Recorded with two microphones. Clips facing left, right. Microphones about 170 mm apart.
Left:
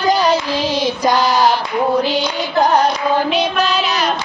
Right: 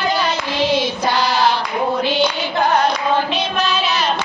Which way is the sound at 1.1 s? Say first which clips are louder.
Left 4 dB; 45° left (ahead or behind).